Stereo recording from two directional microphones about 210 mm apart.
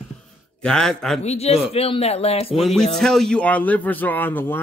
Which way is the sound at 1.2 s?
30° left (ahead or behind).